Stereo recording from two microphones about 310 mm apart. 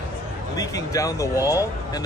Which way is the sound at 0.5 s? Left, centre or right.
Centre.